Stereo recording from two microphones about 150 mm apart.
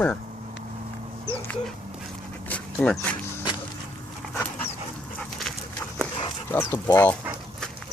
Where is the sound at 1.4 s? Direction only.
10° left (ahead or behind).